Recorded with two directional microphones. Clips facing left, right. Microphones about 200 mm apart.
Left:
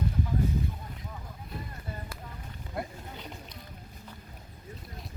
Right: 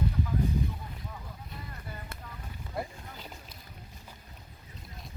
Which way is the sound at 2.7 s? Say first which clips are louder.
Even; 5° right (ahead or behind).